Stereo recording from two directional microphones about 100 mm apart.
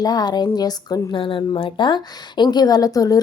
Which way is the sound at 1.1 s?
60° left (ahead or behind).